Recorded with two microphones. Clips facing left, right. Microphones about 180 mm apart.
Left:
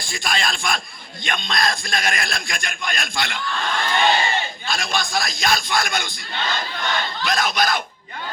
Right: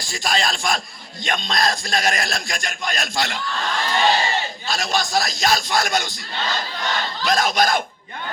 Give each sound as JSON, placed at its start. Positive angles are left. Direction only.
{"t": 0.0, "sound": "a man's voice", "side_deg": -40}